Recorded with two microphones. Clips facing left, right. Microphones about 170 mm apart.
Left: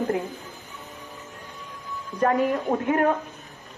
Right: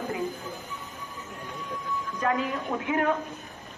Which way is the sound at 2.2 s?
50° left (ahead or behind).